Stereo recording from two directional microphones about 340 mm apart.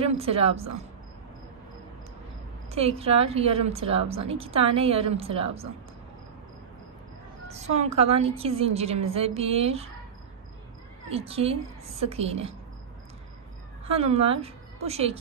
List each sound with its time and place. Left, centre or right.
0.0 s a woman's voice: centre
2.7 s a woman's voice: centre
7.5 s a woman's voice: centre
11.1 s a woman's voice: centre
13.8 s a woman's voice: centre